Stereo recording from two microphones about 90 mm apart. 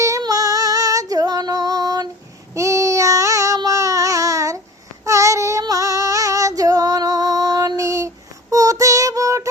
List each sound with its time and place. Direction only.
0.2 s female singing: 40° right (ahead or behind)
2.6 s child singing: 35° right (ahead or behind)
5.0 s female singing: 35° right (ahead or behind)